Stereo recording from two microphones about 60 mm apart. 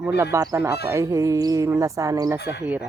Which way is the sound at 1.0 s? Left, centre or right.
Right.